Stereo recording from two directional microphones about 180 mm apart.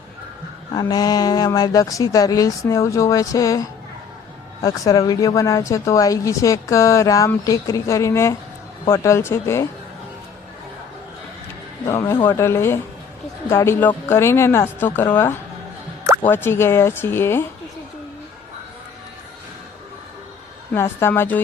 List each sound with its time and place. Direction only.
0.7 s speech: 20° left (ahead or behind)
11.9 s speech: 15° left (ahead or behind)
20.7 s speech: 15° left (ahead or behind)